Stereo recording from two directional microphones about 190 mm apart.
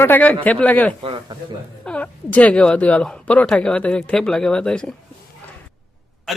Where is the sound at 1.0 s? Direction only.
30° right (ahead or behind).